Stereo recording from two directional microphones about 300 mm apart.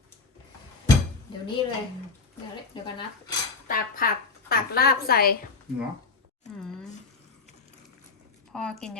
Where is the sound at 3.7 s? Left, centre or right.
Left.